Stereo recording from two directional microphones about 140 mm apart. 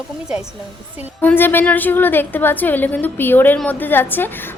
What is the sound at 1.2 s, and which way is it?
A woman's voice, 15° left (ahead or behind).